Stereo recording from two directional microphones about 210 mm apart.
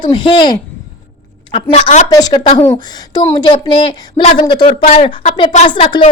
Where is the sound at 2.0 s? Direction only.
20° left (ahead or behind); by 5.0 s 35° left (ahead or behind).